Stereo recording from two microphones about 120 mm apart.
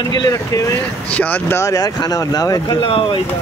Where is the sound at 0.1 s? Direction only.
30° left (ahead or behind).